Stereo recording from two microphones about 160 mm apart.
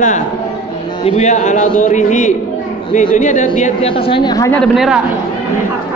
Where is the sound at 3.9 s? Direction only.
35° left (ahead or behind).